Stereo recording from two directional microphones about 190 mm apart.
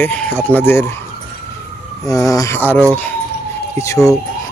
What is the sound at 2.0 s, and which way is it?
Speech, 15° left (ahead or behind).